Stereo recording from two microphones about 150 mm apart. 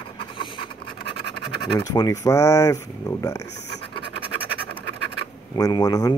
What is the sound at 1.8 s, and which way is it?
Speech, 25° left (ahead or behind).